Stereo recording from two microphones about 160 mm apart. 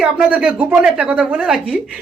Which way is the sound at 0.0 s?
5° right (ahead or behind).